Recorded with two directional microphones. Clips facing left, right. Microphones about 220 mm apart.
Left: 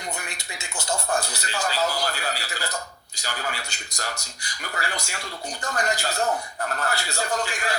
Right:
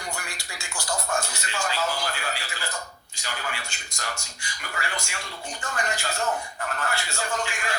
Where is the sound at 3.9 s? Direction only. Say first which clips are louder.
Left 2 dB; 40° left (ahead or behind).